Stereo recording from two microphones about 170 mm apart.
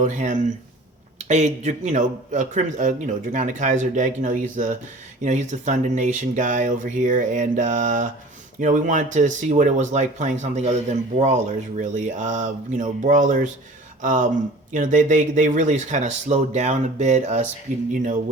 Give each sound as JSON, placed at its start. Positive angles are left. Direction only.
{"t": 0.0, "sound": "a man's voice", "side_deg": -45}